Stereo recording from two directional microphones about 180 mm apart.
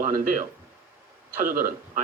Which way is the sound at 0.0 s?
45° right (ahead or behind).